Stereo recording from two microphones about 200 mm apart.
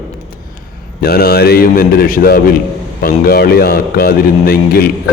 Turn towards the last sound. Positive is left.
turn(degrees=50)  # may be behind; listen again after turning